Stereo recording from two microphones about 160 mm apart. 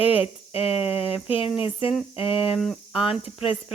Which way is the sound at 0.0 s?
35° left (ahead or behind).